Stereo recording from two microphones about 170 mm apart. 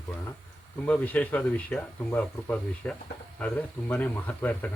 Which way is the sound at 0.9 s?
10° left (ahead or behind).